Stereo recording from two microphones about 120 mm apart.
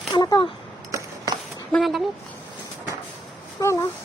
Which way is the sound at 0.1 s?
30° left (ahead or behind).